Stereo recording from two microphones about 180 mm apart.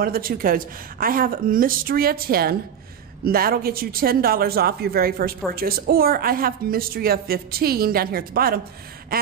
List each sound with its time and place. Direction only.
0.0 s a woman's voice: 55° right (ahead or behind)